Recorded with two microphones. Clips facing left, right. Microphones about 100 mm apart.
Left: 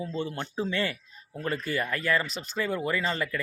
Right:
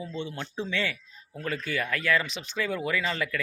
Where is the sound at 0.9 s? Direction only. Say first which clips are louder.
Left 2 dB; 10° left (ahead or behind).